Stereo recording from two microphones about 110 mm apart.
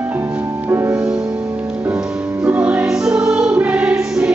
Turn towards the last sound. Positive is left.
turn(degrees=-10)  # may be behind; listen again after turning